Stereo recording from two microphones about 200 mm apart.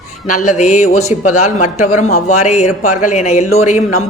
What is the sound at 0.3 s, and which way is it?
Speech, 40° left (ahead or behind).